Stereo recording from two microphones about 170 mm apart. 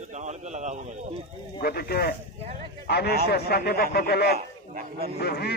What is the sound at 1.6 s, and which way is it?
Speech, 65° left (ahead or behind).